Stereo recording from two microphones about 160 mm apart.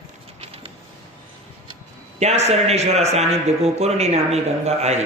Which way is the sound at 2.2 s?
45° right (ahead or behind).